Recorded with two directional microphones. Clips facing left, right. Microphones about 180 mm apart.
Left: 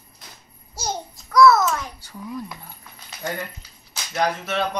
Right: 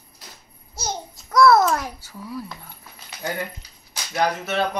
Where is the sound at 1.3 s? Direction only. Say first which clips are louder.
Even; 55° right (ahead or behind).